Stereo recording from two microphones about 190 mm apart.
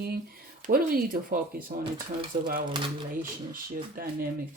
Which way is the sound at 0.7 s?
50° right (ahead or behind).